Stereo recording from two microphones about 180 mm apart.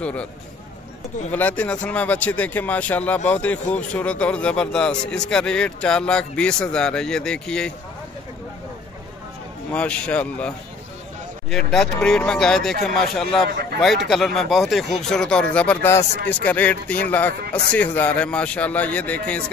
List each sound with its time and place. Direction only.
0.0 s speech: 5° left (ahead or behind)
1.3 s speech: 5° left (ahead or behind)
9.7 s speech: 5° left (ahead or behind)
11.5 s speech: centre (ahead or behind)
13.5 s a sound: 55° right (ahead or behind)
13.7 s speech: centre (ahead or behind)